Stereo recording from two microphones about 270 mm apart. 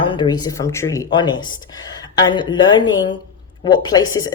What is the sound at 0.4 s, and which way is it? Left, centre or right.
Speech, centre.